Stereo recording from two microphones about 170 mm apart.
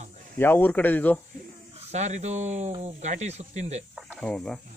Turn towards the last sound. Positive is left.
turn(degrees=5)  # may be behind; listen again after turning